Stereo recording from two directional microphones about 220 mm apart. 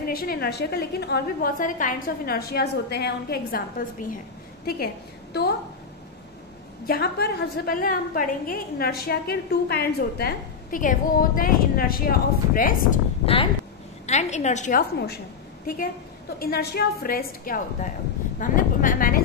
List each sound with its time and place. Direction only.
0.0 s a woman's voice: 45° left (ahead or behind)
6.9 s a woman's voice: 45° left (ahead or behind)
13.2 s a woman's voice: 25° left (ahead or behind); by 15.1 s 45° left (ahead or behind)
16.3 s a woman's voice: 45° left (ahead or behind)